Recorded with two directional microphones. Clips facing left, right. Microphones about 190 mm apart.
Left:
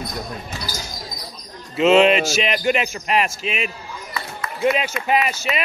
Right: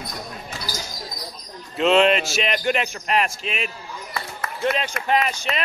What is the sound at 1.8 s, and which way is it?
Speech, 5° left (ahead or behind).